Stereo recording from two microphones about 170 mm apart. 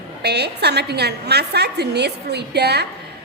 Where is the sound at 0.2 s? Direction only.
75° right (ahead or behind).